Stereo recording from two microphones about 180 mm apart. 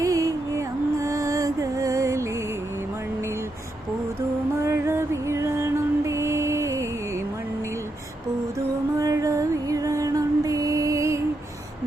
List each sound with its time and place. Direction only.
0.0 s music: 20° right (ahead or behind)
4.6 s music: 15° right (ahead or behind)
8.5 s music: 15° right (ahead or behind)